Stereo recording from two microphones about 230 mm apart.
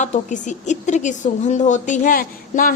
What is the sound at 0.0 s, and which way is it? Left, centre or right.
Speech, left.